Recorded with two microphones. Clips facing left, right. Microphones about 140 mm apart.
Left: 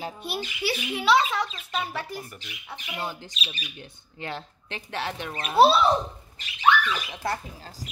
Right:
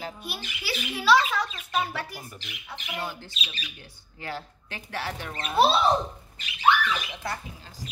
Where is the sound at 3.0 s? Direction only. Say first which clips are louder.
Left 1 dB; 20° left (ahead or behind).